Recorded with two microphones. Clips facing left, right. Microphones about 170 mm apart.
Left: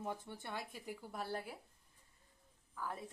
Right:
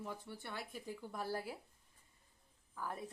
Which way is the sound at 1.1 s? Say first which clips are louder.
Right 2 dB; centre (ahead or behind).